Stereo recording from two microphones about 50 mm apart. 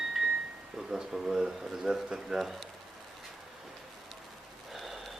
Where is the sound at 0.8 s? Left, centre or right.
Centre.